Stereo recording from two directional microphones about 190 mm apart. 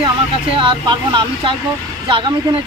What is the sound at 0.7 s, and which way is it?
A woman's voice, 25° right (ahead or behind).